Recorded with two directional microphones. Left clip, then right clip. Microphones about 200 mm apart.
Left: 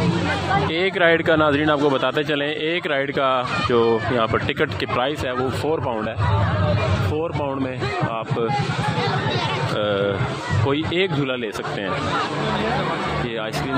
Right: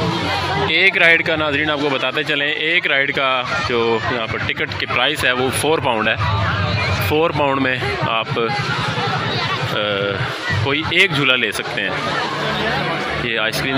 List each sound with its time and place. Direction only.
0.7 s speech: 15° left (ahead or behind)
5.7 s speech: centre (ahead or behind)
10.7 s speech: 15° left (ahead or behind)